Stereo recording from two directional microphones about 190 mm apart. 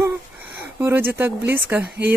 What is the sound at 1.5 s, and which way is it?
Speech, 10° right (ahead or behind).